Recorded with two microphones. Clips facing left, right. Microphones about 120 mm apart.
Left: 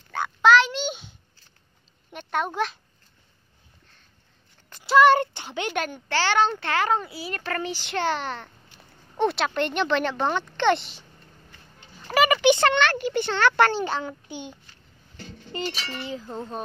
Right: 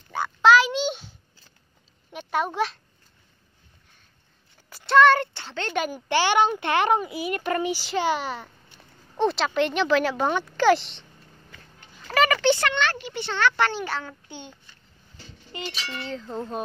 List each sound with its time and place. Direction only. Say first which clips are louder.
0.1 s a sound: right 1 dB; 5° right (ahead or behind)
2.1 s a child's voice: right 1 dB; 5° right (ahead or behind)
4.6 s a sound: even; 5° right (ahead or behind)
4.9 s child singing: even; 15° left (ahead or behind)
5.7 s chink: right 3 dB; 5° right (ahead or behind)
6.0 s a child's voice: right 2 dB; 15° right (ahead or behind); by 11.1 s centre (ahead or behind)
12.2 s a sound: left 2 dB; 15° left (ahead or behind)
12.7 s a child's voice: left 4 dB; 60° left (ahead or behind)
13.7 s a child's voice: left 3 dB; 20° left (ahead or behind)
15.5 s speech: left 3 dB; 40° left (ahead or behind)
16.1 s chink: right 4 dB; 5° left (ahead or behind)